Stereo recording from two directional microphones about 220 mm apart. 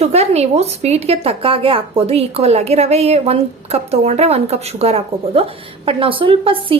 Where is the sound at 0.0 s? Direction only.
30° right (ahead or behind).